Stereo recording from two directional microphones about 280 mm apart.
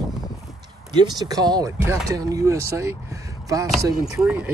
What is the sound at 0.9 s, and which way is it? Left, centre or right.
Speech, centre.